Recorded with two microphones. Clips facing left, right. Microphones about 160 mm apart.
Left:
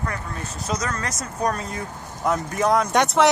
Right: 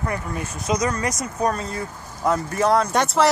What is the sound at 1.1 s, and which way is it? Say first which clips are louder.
Speech: right 2 dB; centre (ahead or behind).